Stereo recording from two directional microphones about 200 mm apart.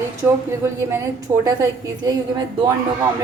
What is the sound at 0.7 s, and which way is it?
A woman's voice, 15° right (ahead or behind).